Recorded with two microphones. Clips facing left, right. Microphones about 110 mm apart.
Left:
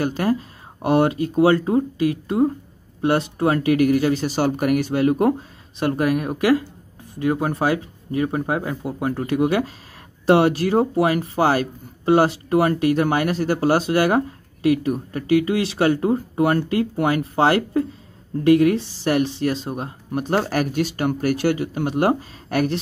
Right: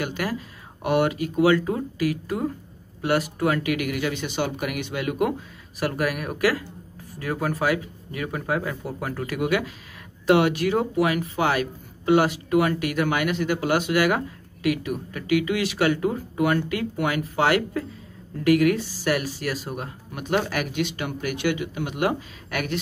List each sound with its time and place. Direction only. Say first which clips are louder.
0.0 s speech: left 7 dB; 30° left (ahead or behind)